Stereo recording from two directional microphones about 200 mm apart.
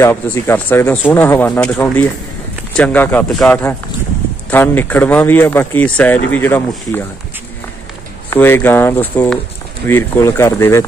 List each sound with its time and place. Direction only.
0.0 s speech: 10° left (ahead or behind)
8.3 s speech: 10° left (ahead or behind)